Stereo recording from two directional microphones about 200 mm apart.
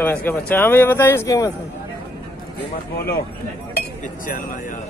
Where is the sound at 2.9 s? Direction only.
50° left (ahead or behind).